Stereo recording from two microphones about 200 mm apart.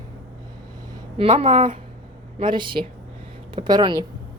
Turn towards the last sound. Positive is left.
turn(degrees=-20)  # may be behind; listen again after turning